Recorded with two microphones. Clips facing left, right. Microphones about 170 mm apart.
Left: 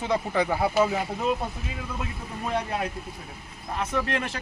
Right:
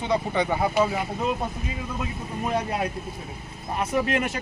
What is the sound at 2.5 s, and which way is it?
Speech, 5° right (ahead or behind).